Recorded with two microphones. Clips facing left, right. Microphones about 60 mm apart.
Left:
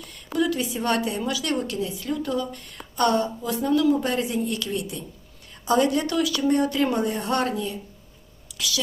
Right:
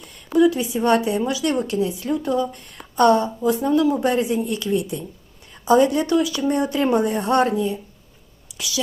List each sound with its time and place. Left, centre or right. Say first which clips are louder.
0.3 s a woman's voice: right 7 dB; centre; by 7.5 s right
7.5 s a woman's voice: right 6 dB; centre